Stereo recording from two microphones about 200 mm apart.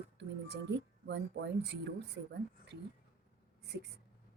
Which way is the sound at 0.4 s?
55° right (ahead or behind).